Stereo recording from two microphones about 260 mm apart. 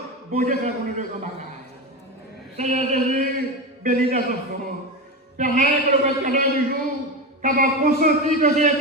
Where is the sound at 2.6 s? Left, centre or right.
Right.